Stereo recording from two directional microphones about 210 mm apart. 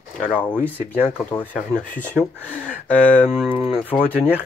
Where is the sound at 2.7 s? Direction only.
5° left (ahead or behind).